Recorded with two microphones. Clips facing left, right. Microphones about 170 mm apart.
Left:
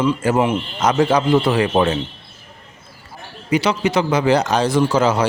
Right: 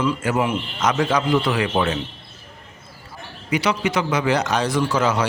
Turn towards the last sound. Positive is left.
turn(degrees=30)  # may be behind; listen again after turning